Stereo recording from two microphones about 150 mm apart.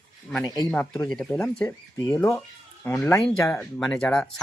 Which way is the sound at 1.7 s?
20° left (ahead or behind).